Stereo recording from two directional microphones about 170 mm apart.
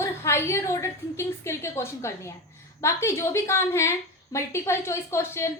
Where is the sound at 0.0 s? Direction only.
15° left (ahead or behind).